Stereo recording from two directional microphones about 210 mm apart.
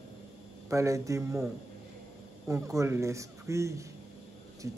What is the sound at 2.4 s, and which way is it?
A man's voice, 15° right (ahead or behind).